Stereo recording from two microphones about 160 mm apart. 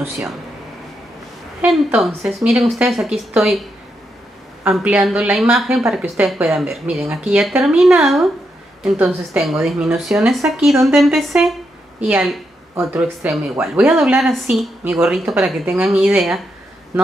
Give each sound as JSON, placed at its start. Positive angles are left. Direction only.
{"t": 1.6, "sound": "a woman's voice", "side_deg": -5}
{"t": 4.6, "sound": "a woman's voice", "side_deg": -5}